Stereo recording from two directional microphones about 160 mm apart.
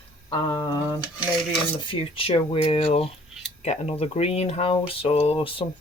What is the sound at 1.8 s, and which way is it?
Speech, 35° left (ahead or behind).